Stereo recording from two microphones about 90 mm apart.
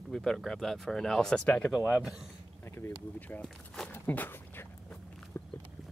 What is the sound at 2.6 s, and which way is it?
Speech, 25° left (ahead or behind).